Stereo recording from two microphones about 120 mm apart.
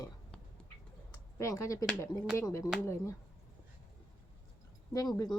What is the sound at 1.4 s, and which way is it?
Speech, 25° left (ahead or behind).